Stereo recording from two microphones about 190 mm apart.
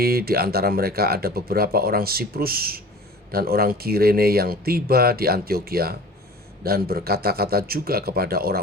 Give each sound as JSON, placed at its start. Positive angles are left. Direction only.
{"t": 0.0, "sound": "speech", "side_deg": -55}